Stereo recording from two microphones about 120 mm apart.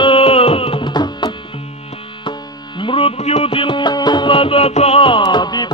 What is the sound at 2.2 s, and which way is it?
Music, 45° left (ahead or behind).